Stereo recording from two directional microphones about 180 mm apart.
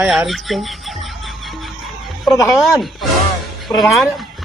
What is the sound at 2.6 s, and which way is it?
Speech, centre (ahead or behind).